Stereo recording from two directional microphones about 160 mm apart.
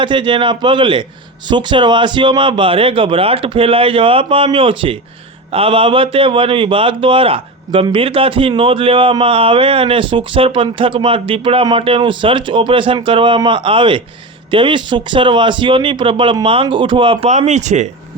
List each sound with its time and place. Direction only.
0.0 s a man's voice: 30° right (ahead or behind); by 17.9 s 45° right (ahead or behind)